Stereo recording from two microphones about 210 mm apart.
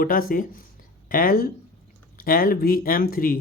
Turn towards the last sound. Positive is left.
turn(degrees=45)  # may be behind; listen again after turning